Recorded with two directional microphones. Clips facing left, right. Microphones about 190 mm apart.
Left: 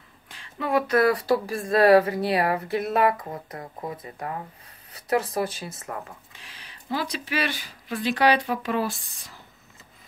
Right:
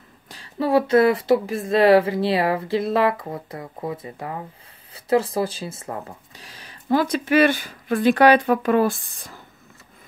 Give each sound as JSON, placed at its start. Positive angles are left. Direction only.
{"t": 0.3, "sound": "speech", "side_deg": -35}